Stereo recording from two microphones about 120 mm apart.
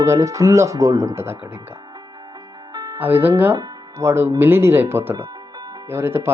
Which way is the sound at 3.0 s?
15° right (ahead or behind).